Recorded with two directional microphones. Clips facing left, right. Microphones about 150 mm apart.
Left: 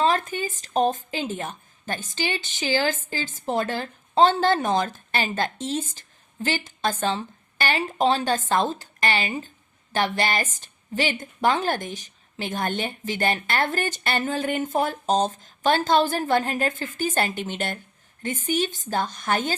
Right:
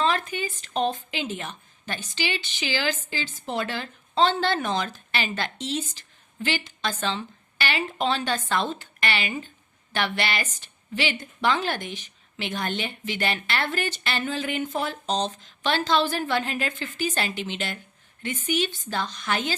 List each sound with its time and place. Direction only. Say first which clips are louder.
0.0 s a woman's voice: left 3 dB; 40° left (ahead or behind)